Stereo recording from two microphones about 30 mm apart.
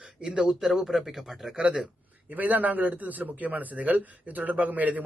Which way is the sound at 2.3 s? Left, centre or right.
Right.